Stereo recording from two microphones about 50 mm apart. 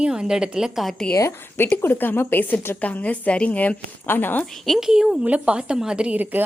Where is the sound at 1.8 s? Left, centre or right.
Left.